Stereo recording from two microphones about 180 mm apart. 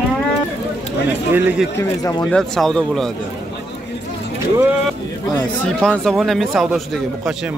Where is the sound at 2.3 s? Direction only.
5° left (ahead or behind).